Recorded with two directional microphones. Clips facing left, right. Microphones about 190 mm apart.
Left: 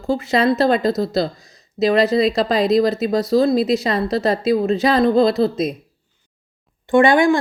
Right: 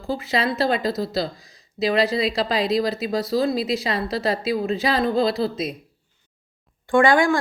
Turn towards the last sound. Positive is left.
turn(degrees=20)  # may be behind; listen again after turning